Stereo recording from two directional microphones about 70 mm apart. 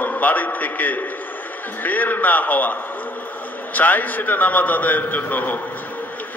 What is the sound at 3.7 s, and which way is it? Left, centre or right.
A man's voice, left.